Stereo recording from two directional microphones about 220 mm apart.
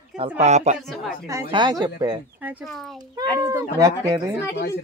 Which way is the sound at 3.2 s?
15° right (ahead or behind).